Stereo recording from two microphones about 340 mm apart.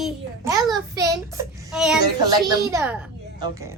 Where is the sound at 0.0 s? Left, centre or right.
Centre.